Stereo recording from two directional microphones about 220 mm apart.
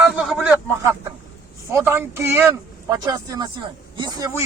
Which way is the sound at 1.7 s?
10° right (ahead or behind).